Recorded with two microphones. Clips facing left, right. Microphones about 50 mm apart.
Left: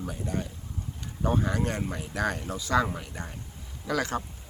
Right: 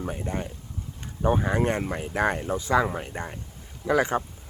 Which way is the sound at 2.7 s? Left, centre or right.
Centre.